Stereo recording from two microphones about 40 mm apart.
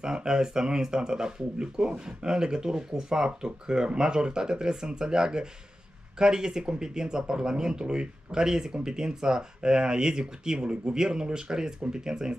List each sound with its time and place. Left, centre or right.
0.0 s speech: centre